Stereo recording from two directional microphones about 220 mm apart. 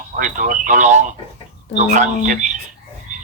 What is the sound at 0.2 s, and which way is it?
Speech, 35° right (ahead or behind).